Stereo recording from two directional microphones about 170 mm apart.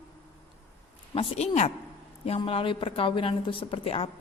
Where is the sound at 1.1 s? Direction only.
35° left (ahead or behind).